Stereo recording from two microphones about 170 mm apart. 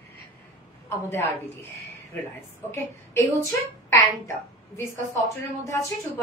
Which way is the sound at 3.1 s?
15° left (ahead or behind).